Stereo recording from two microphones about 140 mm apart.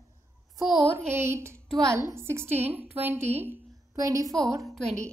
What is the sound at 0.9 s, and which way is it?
Speech, 15° right (ahead or behind).